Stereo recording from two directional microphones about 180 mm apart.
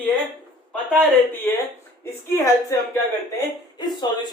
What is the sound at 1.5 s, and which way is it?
A woman's voice, 10° left (ahead or behind).